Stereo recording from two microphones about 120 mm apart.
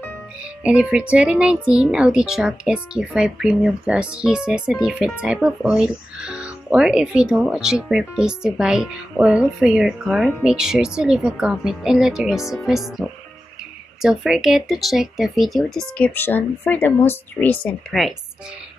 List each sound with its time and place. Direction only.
0.7 s speech: 10° right (ahead or behind)
16.2 s speech: 15° left (ahead or behind)